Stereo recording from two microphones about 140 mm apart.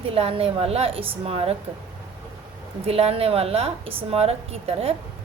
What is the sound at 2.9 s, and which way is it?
A woman's voice, 45° right (ahead or behind).